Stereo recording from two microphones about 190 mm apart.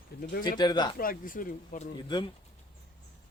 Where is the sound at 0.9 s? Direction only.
50° left (ahead or behind).